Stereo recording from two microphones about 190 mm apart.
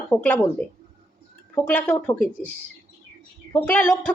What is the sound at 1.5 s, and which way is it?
Speech, 10° left (ahead or behind).